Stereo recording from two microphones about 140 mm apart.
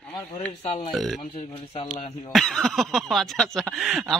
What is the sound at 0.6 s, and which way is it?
Speech, 50° left (ahead or behind).